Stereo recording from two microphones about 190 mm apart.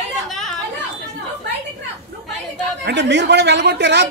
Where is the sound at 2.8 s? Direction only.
65° right (ahead or behind).